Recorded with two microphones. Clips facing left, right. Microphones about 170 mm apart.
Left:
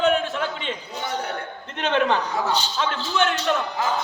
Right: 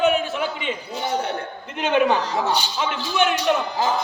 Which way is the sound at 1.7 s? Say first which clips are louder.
Right 2 dB; 10° right (ahead or behind).